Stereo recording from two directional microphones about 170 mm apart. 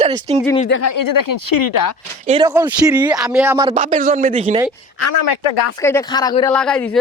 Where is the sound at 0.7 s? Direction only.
90° left.